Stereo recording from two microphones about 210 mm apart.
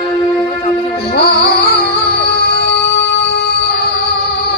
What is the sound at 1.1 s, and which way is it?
Music, 50° left (ahead or behind).